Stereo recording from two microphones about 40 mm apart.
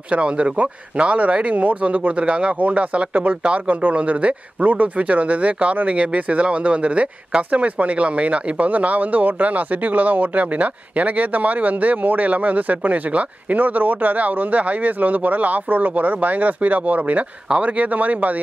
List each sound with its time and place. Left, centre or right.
0.1 s speech: right